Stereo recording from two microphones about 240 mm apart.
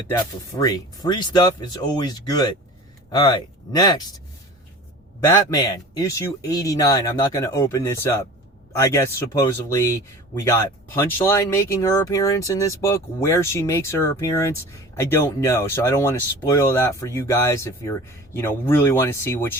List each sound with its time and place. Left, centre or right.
0.1 s speech: centre
5.3 s speech: centre
10.4 s speech: centre